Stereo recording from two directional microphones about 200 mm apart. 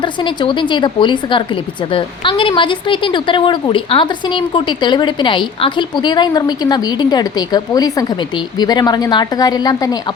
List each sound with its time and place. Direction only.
0.4 s speech: 25° left (ahead or behind)